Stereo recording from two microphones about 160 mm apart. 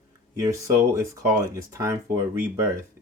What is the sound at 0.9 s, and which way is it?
Speech, 20° right (ahead or behind).